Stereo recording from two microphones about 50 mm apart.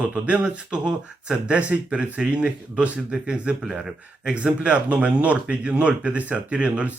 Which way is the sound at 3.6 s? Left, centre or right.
Centre.